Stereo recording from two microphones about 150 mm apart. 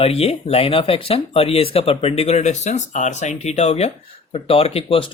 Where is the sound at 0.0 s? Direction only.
40° left (ahead or behind).